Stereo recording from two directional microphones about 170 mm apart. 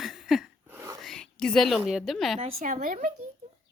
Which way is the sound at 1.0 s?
5° left (ahead or behind).